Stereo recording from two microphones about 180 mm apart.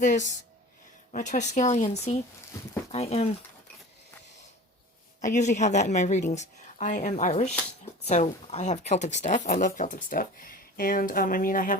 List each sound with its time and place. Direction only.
0.0 s a woman's voice: 45° left (ahead or behind)
5.2 s a woman's voice: 40° left (ahead or behind)